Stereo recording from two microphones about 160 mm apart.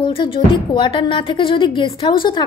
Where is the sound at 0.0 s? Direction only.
30° left (ahead or behind).